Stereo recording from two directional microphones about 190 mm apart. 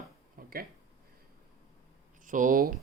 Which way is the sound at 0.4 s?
50° right (ahead or behind).